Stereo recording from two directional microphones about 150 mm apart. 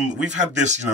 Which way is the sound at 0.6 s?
50° right (ahead or behind).